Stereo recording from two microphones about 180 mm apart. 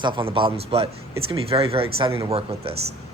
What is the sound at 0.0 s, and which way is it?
A man's voice, 25° right (ahead or behind).